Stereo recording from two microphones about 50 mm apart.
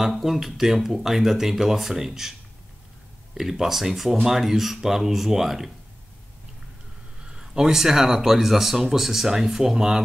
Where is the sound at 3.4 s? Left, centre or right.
Centre.